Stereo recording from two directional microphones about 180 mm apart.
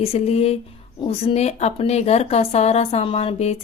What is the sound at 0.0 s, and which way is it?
Speech, 35° left (ahead or behind).